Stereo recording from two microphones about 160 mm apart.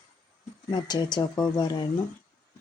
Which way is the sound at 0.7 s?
25° left (ahead or behind).